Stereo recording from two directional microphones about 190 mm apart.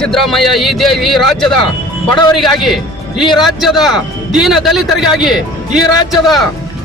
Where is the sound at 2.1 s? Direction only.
20° left (ahead or behind).